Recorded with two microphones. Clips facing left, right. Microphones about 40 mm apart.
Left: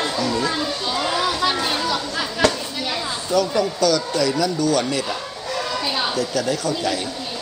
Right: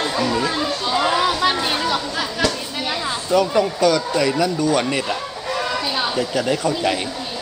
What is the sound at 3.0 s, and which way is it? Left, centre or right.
Speech, right.